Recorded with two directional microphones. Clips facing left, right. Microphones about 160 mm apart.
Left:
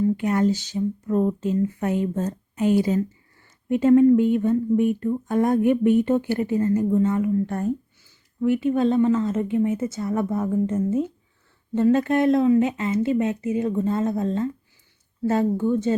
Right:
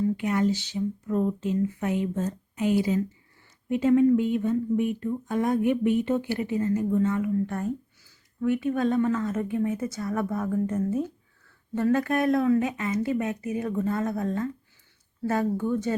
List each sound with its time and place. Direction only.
0.0 s speech: 40° left (ahead or behind)
8.4 s speech: 25° left (ahead or behind)